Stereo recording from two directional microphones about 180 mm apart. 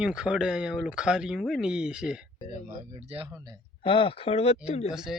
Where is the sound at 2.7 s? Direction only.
30° right (ahead or behind).